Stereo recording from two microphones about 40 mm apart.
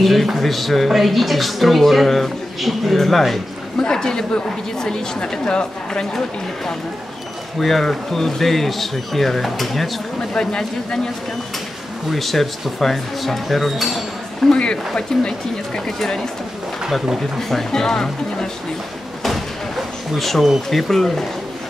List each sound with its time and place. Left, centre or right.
0.0 s speech: centre
3.8 s a woman's voice: centre
7.6 s speech: centre
10.3 s speech: centre
12.1 s speech: centre
14.5 s speech: left
17.4 s a woman's voice: centre
20.2 s speech: centre